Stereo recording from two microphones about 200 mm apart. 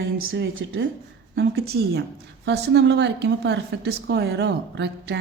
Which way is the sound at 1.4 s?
55° right (ahead or behind).